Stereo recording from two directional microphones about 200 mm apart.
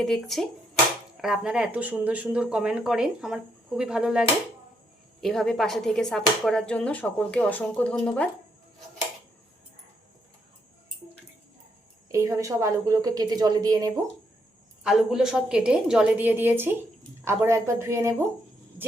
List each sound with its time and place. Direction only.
0.0 s speech: centre (ahead or behind)
12.1 s a woman's voice: 15° right (ahead or behind)
14.8 s a woman's voice: centre (ahead or behind)